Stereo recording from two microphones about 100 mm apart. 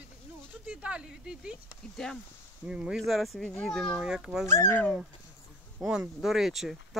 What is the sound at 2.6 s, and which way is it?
Speech, 5° right (ahead or behind).